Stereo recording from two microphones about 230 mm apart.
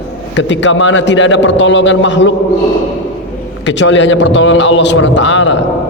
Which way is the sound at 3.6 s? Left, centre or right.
Left.